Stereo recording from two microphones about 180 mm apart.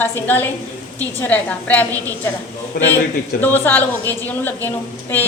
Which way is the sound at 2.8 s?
65° left (ahead or behind).